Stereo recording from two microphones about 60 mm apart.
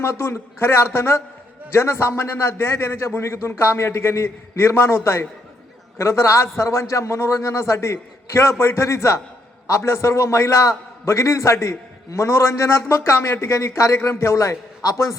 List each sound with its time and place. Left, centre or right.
0.0 s a man's voice: left